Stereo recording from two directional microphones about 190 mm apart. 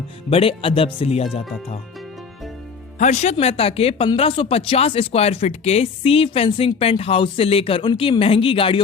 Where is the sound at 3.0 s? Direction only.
35° left (ahead or behind).